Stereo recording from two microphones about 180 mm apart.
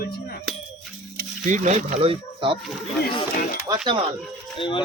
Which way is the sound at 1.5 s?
40° right (ahead or behind).